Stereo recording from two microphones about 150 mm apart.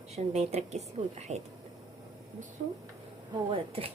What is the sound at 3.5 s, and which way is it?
Speech, 40° right (ahead or behind).